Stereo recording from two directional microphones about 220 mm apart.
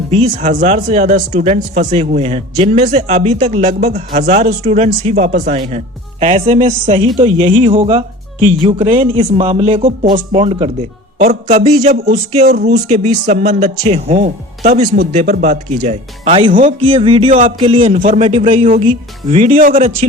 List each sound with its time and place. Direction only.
0.1 s speech: 30° right (ahead or behind)
11.9 s music: 45° right (ahead or behind)
12.7 s speech: 35° right (ahead or behind)
16.8 s speech: 25° right (ahead or behind)
19.7 s speech: 25° right (ahead or behind)